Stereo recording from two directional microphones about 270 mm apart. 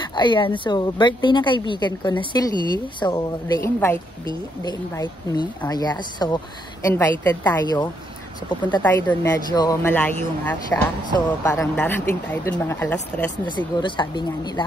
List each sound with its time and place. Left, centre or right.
0.1 s speech: centre